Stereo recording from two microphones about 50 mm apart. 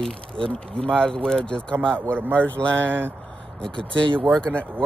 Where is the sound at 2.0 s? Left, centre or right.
Right.